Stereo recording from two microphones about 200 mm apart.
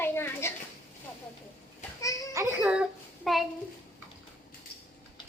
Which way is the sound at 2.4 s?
10° right (ahead or behind).